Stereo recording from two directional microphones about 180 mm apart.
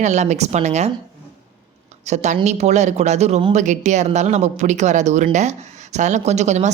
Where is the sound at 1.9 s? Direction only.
40° right (ahead or behind).